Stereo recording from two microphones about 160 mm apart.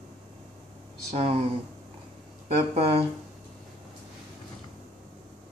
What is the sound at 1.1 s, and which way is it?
Speech, 40° right (ahead or behind).